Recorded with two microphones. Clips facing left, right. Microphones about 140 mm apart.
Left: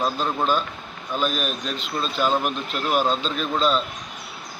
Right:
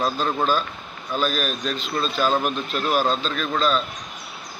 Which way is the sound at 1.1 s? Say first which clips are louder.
Right 1 dB; 20° left (ahead or behind).